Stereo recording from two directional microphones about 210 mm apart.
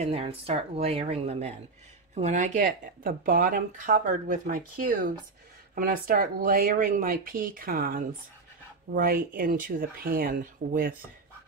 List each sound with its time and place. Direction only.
0.0 s speech: 30° right (ahead or behind)